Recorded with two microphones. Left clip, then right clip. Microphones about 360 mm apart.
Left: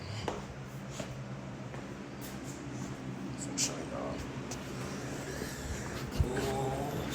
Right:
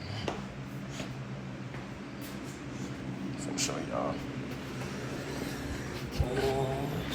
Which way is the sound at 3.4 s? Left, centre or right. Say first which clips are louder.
Right 1 dB; centre.